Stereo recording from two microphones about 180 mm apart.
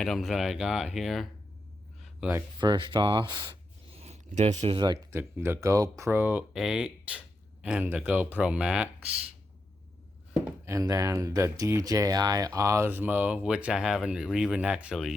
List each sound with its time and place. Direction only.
0.0 s speech: centre (ahead or behind)
2.6 s speech: 25° right (ahead or behind)
3.9 s a sound: 35° right (ahead or behind)
4.8 s speech: 15° right (ahead or behind)
10.4 s speech: 15° right (ahead or behind)